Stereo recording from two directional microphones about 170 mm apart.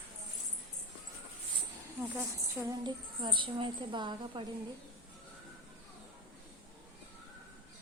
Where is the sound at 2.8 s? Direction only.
30° right (ahead or behind).